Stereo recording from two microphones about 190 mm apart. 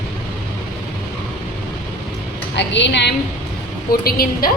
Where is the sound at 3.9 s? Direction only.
50° left (ahead or behind).